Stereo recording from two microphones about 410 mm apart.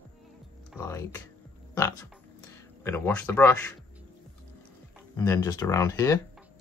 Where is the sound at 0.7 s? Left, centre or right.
Centre.